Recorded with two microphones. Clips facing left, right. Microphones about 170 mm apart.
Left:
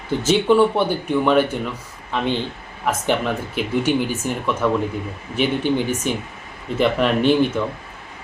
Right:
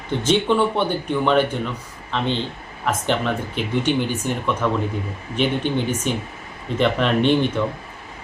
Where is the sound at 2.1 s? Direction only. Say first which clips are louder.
Left 1 dB; 10° left (ahead or behind).